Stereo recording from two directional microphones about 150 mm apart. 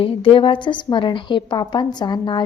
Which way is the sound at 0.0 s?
35° left (ahead or behind).